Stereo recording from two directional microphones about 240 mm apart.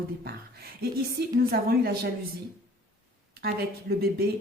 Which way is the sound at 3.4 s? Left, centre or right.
Right.